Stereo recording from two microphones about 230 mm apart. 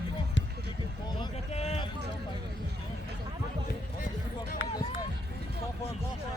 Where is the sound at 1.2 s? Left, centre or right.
Left.